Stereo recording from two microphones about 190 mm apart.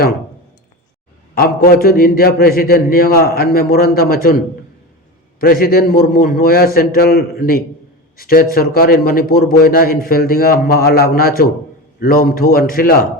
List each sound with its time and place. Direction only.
1.4 s a man's voice: 50° left (ahead or behind)